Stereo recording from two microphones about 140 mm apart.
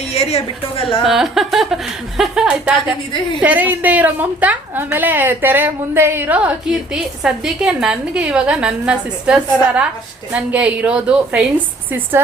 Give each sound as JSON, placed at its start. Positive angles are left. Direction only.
{"t": 0.1, "sound": "a woman's voice", "side_deg": 50}
{"t": 1.0, "sound": "a woman's voice", "side_deg": 0}